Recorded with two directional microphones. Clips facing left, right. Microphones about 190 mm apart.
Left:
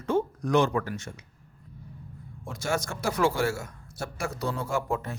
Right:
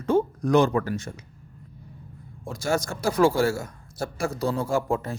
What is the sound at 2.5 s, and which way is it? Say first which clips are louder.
A man's voice: right 4 dB; 35° right (ahead or behind).